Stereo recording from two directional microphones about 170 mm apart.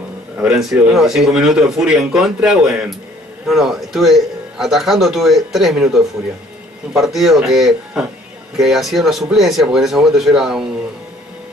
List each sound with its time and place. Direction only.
0.4 s speech: centre (ahead or behind)
6.9 s speech: centre (ahead or behind)